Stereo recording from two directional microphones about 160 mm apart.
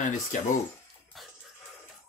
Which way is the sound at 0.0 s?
50° left (ahead or behind).